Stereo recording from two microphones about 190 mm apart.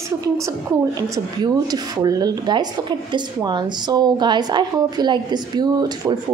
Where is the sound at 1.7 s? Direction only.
20° right (ahead or behind).